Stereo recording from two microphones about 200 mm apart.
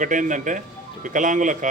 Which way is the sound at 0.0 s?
40° right (ahead or behind).